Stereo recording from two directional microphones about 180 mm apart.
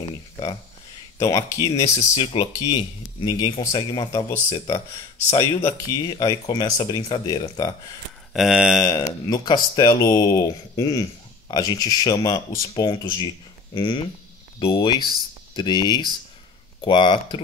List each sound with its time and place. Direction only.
1.2 s speech: 20° left (ahead or behind)
8.3 s a sound: centre (ahead or behind)
8.8 s speech: 20° left (ahead or behind)